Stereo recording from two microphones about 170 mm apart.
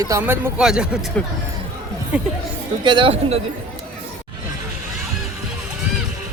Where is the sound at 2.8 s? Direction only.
30° right (ahead or behind).